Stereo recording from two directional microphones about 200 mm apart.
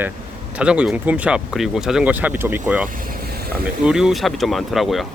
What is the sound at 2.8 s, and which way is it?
Vehicle, 45° right (ahead or behind).